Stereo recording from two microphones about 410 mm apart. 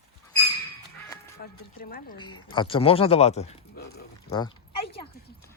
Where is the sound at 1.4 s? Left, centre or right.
Left.